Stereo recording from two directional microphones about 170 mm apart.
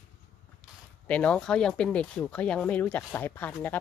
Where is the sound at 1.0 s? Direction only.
5° left (ahead or behind).